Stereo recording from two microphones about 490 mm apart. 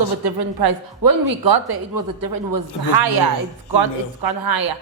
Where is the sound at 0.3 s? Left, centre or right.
Right.